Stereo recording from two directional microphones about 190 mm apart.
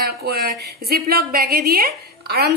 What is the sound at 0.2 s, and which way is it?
A woman's voice, 55° right (ahead or behind).